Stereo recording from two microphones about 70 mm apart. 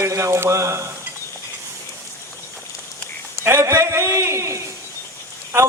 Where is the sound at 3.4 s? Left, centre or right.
Right.